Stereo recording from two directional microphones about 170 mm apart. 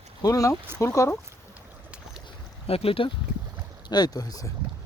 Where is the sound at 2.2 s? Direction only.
35° left (ahead or behind).